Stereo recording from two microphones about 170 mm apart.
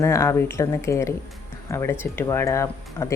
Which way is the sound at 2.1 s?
15° left (ahead or behind).